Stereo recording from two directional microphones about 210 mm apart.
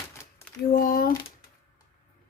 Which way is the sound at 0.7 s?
45° left (ahead or behind).